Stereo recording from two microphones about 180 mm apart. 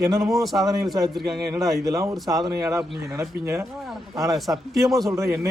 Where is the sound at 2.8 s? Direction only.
Centre (ahead or behind).